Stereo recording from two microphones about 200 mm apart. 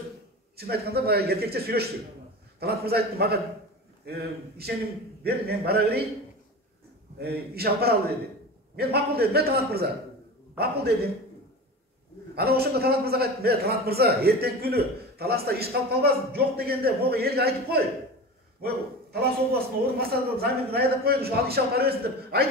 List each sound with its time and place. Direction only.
0.6 s a man's voice: 50° right (ahead or behind)
7.2 s a man's voice: 50° right (ahead or behind)
12.4 s a man's voice: 50° right (ahead or behind)
20.0 s a man's voice: 50° right (ahead or behind)